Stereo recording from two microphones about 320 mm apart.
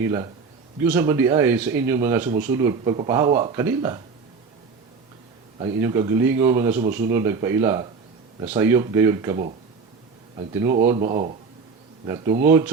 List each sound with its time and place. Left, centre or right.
0.0 s speech: centre
5.5 s speech: centre
10.9 s speech: right
12.0 s speech: centre